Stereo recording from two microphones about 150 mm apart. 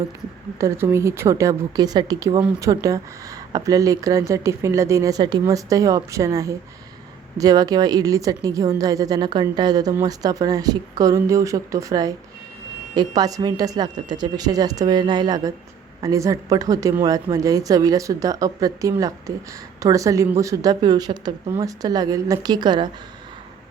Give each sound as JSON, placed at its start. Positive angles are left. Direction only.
{"t": 0.6, "sound": "a woman's voice", "side_deg": -15}